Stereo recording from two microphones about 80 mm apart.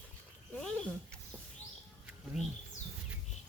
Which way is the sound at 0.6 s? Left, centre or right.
Centre.